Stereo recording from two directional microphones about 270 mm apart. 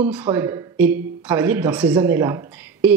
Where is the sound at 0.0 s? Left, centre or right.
Centre.